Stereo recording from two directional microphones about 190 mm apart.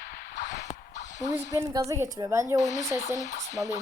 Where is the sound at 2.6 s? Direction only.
40° left (ahead or behind).